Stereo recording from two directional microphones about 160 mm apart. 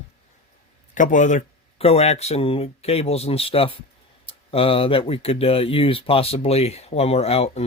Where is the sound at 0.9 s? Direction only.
55° left (ahead or behind).